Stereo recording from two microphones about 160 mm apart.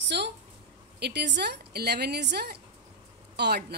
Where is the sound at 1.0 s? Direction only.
90° right.